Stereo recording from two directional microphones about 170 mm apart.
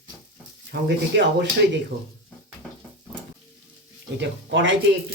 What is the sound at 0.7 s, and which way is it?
Speech, 90° right.